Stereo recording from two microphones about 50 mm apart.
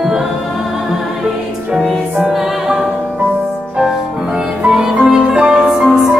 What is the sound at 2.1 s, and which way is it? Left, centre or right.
Music, centre.